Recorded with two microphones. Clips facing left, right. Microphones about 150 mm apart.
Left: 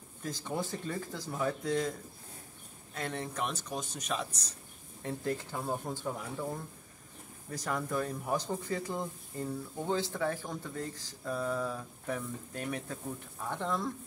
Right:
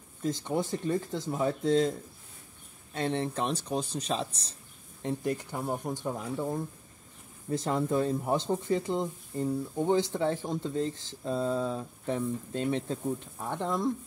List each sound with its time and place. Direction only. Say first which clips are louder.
0.2 s speech: right 6 dB; 20° right (ahead or behind)
5.0 s speech: right 4 dB; 20° right (ahead or behind)